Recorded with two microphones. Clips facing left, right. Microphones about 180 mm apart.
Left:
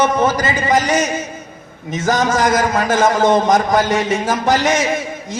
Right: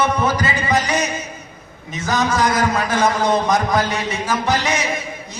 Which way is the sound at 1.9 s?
45° left (ahead or behind).